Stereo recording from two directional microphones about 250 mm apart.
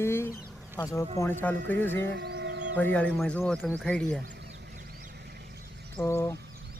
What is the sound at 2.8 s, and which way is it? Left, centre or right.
Speech, centre.